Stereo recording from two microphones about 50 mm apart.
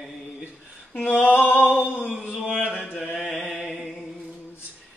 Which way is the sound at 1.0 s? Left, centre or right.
Left.